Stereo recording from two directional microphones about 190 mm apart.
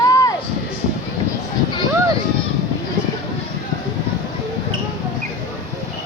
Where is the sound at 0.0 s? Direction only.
20° left (ahead or behind).